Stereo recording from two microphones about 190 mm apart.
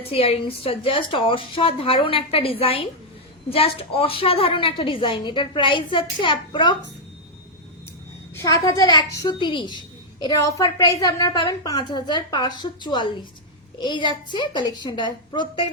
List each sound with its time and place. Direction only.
0.0 s a woman's voice: 30° left (ahead or behind)
8.4 s a woman's voice: 20° left (ahead or behind)